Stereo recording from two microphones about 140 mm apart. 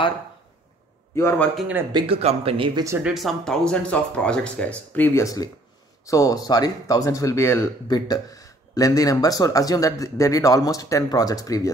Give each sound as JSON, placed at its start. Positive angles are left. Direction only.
{"t": 1.1, "sound": "speech", "side_deg": 20}
{"t": 1.9, "sound": "speech", "side_deg": -35}
{"t": 3.0, "sound": "speech", "side_deg": -5}